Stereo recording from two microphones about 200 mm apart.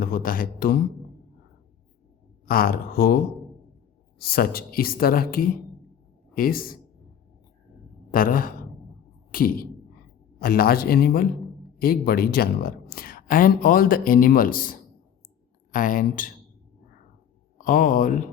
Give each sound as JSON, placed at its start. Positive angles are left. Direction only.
{"t": 0.0, "sound": "speech", "side_deg": 45}
{"t": 2.5, "sound": "speech", "side_deg": 45}
{"t": 4.2, "sound": "speech", "side_deg": 50}
{"t": 8.1, "sound": "speech", "side_deg": 45}
{"t": 17.6, "sound": "speech", "side_deg": 40}